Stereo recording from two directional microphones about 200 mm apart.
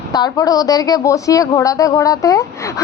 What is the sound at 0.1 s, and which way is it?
Speech, 20° left (ahead or behind).